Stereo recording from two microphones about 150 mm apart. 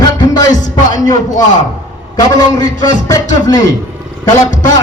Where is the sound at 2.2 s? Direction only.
25° left (ahead or behind).